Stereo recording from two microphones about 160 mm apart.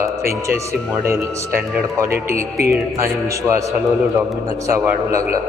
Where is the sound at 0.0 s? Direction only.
20° right (ahead or behind).